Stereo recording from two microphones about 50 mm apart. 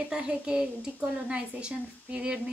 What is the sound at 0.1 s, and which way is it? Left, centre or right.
Speech, centre.